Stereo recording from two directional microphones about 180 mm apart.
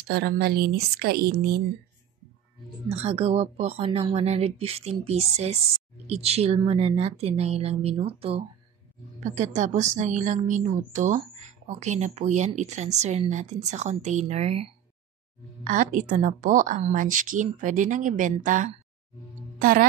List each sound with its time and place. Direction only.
0.0 s speech: 60° right (ahead or behind)
2.9 s a woman's voice: 35° right (ahead or behind)
15.6 s a woman's voice: 45° right (ahead or behind)